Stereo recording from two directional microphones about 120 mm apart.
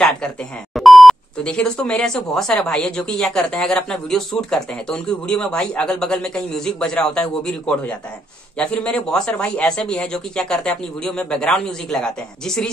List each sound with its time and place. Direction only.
0.7 s speech: centre (ahead or behind)